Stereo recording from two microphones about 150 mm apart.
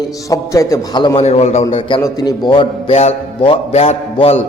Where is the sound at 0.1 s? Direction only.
20° left (ahead or behind).